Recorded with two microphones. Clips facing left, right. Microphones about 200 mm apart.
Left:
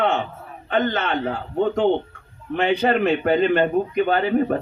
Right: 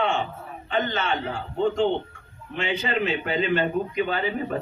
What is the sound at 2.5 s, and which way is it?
Speech, 55° left (ahead or behind).